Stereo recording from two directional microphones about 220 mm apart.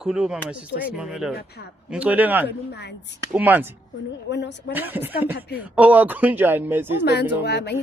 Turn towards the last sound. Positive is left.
turn(degrees=50)  # may be behind; listen again after turning